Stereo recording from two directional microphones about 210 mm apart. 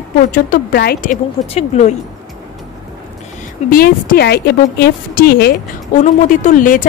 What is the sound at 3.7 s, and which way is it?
Speech, 45° left (ahead or behind).